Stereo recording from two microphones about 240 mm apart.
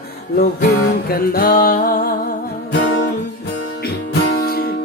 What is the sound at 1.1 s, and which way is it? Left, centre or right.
Music, left.